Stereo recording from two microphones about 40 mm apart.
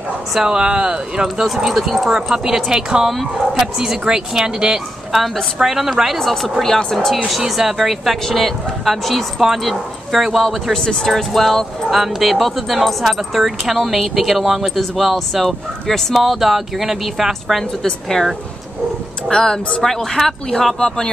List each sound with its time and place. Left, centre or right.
0.3 s speech: centre
5.1 s speech: centre
6.1 s speech: centre
7.2 s speech: centre
10.7 s speech: centre
19.3 s speech: centre